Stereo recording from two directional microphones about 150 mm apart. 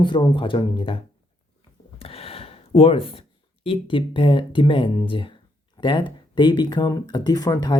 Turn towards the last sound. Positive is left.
turn(degrees=25)  # may be behind; listen again after turning